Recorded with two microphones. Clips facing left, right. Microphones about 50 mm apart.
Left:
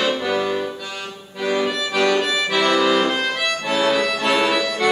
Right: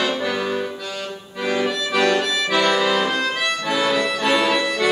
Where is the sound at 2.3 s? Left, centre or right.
Centre.